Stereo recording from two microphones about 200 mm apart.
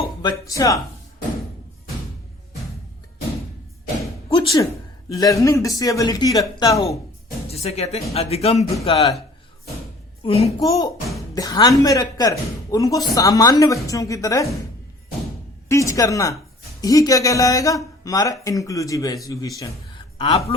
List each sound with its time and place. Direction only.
0.2 s speech: 20° left (ahead or behind)
4.4 s a sound: 20° left (ahead or behind)
5.2 s speech: 15° left (ahead or behind)
7.4 s speech: 30° left (ahead or behind)
10.2 s speech: 30° left (ahead or behind)
10.6 s speech: 15° left (ahead or behind)
15.7 s speech: 15° left (ahead or behind)
20.1 s speech: 25° left (ahead or behind)